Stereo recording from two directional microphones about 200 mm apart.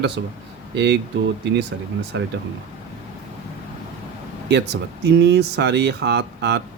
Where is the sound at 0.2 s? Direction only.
60° right (ahead or behind).